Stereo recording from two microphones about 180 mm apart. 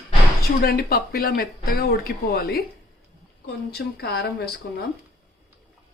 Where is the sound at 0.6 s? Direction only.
60° left (ahead or behind).